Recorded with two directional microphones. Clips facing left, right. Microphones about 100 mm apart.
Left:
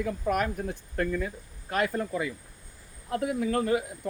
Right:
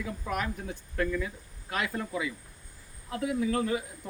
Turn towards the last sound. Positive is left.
turn(degrees=50)  # may be behind; listen again after turning